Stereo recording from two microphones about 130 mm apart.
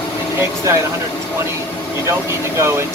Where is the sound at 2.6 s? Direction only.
20° right (ahead or behind).